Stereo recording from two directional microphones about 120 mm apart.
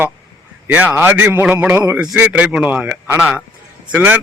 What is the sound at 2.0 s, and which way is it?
A man's voice, 10° right (ahead or behind).